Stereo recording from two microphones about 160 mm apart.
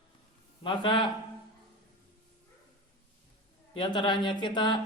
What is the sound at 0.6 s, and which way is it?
Speech, 30° left (ahead or behind).